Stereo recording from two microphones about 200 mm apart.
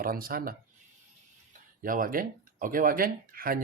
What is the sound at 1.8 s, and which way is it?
Speech, 45° right (ahead or behind).